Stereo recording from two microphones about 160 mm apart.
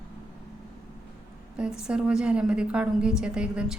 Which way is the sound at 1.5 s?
5° right (ahead or behind).